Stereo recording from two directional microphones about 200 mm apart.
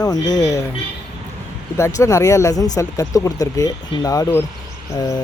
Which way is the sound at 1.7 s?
15° left (ahead or behind).